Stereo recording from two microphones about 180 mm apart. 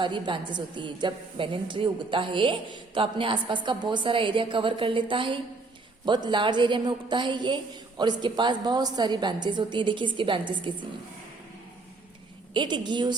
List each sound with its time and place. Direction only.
0.0 s a woman's voice: 25° right (ahead or behind)
12.5 s a woman's voice: 25° right (ahead or behind)